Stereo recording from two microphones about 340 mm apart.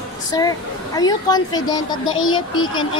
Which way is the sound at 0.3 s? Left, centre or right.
Centre.